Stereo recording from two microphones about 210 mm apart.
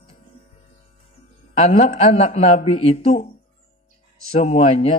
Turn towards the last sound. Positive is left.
turn(degrees=30)  # may be behind; listen again after turning